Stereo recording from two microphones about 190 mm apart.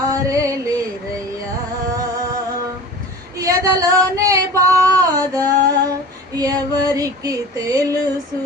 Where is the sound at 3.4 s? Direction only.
15° right (ahead or behind).